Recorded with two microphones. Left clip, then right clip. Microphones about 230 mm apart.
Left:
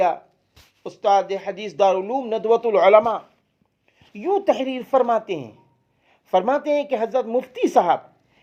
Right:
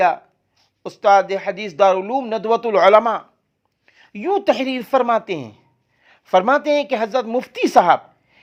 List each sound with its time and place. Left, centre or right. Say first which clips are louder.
0.9 s a woman's voice: right 4 dB; right